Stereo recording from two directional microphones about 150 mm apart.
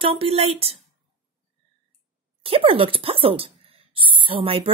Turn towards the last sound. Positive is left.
turn(degrees=-35)  # may be behind; listen again after turning